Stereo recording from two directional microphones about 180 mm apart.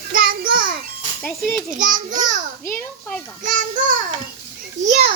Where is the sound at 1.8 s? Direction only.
45° right (ahead or behind).